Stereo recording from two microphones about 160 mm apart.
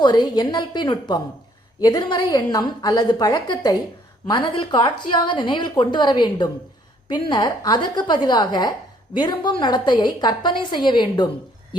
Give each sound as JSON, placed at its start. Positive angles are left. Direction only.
{"t": 0.0, "sound": "a woman's voice", "side_deg": 25}